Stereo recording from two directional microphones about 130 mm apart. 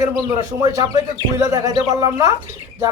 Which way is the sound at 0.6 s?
25° right (ahead or behind).